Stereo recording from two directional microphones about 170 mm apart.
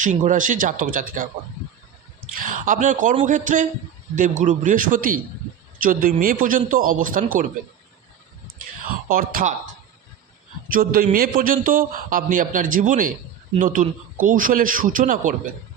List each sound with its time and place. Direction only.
0.0 s a man's voice: 45° right (ahead or behind)
2.3 s a man's voice: 50° right (ahead or behind)
8.8 s speech: 55° right (ahead or behind)
10.7 s a man's voice: 55° right (ahead or behind)